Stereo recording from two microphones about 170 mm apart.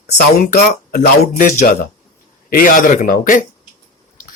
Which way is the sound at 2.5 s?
55° left (ahead or behind).